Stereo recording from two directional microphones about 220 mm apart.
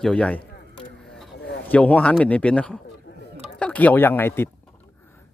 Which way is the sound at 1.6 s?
5° left (ahead or behind).